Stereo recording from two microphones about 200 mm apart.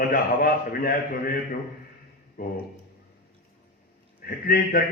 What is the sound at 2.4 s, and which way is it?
Speech, 45° left (ahead or behind).